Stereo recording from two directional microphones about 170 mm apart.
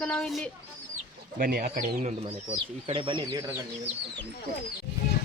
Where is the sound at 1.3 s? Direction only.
60° right (ahead or behind).